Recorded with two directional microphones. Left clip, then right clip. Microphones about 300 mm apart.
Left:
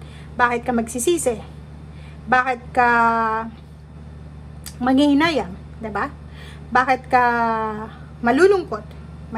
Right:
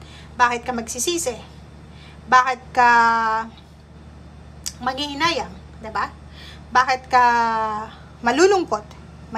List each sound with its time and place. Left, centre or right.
0.4 s a woman's voice: centre
4.6 s a woman's voice: centre